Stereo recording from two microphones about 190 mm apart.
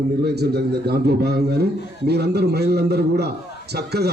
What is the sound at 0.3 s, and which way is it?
A man's voice, 60° right (ahead or behind).